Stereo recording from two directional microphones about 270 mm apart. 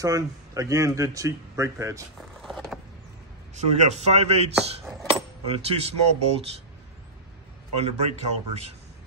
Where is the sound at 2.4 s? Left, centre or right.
Centre.